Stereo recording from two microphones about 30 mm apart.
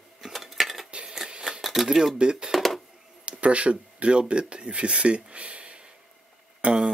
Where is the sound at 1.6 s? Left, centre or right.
Centre.